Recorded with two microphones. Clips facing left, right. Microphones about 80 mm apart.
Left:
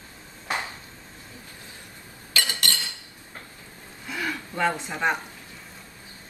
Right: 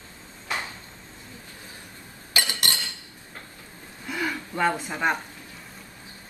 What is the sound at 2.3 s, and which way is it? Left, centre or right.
Dishes, right.